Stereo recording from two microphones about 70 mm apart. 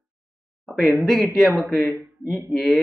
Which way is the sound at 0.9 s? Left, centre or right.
Centre.